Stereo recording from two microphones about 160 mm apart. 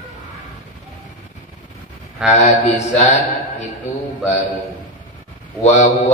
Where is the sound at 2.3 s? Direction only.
45° left (ahead or behind).